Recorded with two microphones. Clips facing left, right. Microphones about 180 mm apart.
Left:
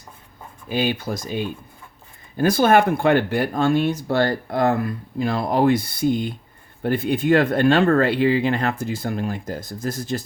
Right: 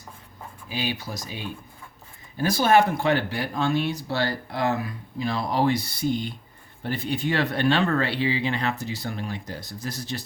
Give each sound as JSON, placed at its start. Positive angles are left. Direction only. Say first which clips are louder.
{"t": 0.7, "sound": "speech", "louder": "left 8 dB", "side_deg": 50}